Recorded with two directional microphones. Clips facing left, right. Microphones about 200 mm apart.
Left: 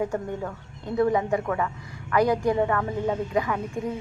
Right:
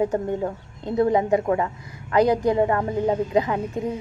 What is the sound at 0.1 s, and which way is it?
Speech, 30° right (ahead or behind).